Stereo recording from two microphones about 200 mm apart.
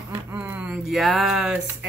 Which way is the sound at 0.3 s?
10° right (ahead or behind).